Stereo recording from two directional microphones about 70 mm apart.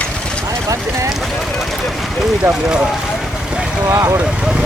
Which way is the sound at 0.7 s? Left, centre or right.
Right.